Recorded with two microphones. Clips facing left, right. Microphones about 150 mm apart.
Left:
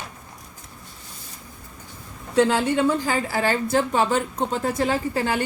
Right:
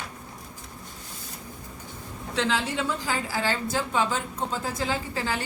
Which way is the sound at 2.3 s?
50° left (ahead or behind).